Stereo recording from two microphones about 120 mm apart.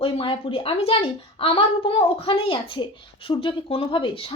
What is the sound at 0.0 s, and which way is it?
A woman's voice, 45° left (ahead or behind).